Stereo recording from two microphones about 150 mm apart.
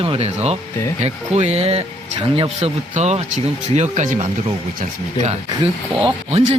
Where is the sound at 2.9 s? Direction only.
50° right (ahead or behind).